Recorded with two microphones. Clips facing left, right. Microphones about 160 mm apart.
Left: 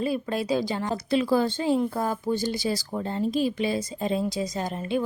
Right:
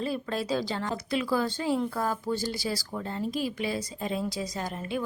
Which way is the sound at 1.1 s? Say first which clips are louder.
Left 5 dB; 30° left (ahead or behind).